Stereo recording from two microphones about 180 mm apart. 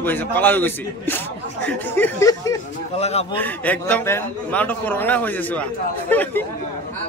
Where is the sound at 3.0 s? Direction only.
35° left (ahead or behind).